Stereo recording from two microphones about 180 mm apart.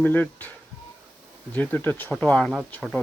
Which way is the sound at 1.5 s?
10° left (ahead or behind).